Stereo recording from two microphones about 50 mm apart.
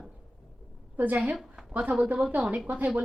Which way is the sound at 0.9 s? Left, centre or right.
Right.